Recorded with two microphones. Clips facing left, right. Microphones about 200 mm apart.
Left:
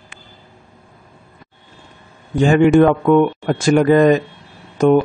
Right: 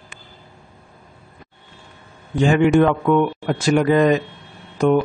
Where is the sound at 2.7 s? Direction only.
40° left (ahead or behind).